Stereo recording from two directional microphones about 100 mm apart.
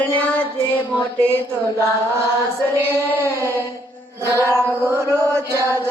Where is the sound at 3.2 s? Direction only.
25° right (ahead or behind).